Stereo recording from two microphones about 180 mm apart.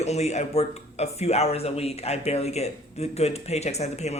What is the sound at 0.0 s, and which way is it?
Speech, 35° left (ahead or behind).